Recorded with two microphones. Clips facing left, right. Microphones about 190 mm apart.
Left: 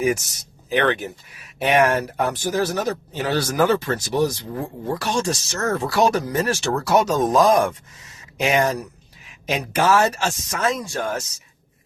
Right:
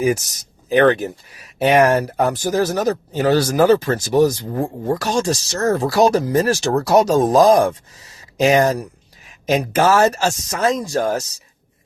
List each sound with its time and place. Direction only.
0.7 s speech: 40° right (ahead or behind)